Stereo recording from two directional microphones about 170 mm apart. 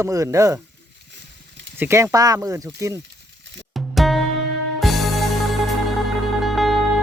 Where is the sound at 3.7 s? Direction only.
Centre (ahead or behind).